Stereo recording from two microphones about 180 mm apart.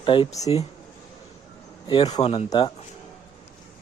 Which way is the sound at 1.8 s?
25° left (ahead or behind).